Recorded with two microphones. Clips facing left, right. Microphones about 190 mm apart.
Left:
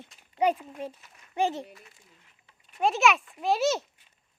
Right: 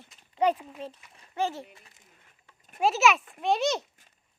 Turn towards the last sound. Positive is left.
turn(degrees=5)  # may be behind; listen again after turning